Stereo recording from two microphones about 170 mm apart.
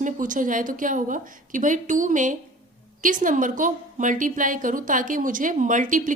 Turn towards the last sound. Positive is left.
turn(degrees=-50)  # may be behind; listen again after turning